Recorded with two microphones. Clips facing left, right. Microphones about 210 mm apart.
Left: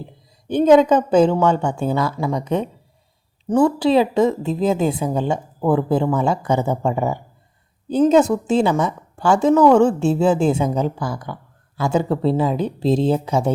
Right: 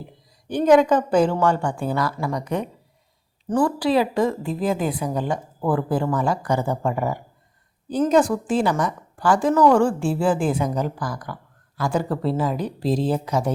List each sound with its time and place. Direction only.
0.0 s a woman's voice: 25° left (ahead or behind)